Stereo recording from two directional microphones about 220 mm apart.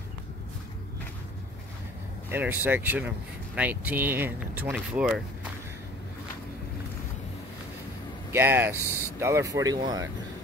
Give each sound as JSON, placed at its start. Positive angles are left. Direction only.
{"t": 2.3, "sound": "speech", "side_deg": -10}
{"t": 8.3, "sound": "speech", "side_deg": -10}
{"t": 8.7, "sound": "speech", "side_deg": 10}
{"t": 9.2, "sound": "speech", "side_deg": -15}